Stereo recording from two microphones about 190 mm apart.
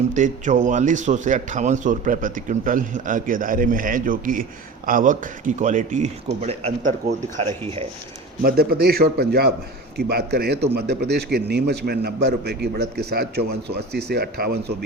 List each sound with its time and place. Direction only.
0.1 s a man's voice: 40° right (ahead or behind)
8.4 s a man's voice: 50° right (ahead or behind)